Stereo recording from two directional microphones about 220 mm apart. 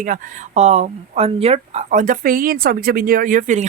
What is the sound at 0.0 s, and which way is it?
Speech, 35° right (ahead or behind).